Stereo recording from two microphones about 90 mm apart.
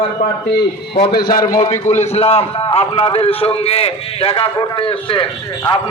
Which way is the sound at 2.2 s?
90° left.